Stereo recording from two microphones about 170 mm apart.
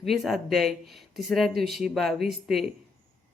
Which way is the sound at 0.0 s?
Centre (ahead or behind).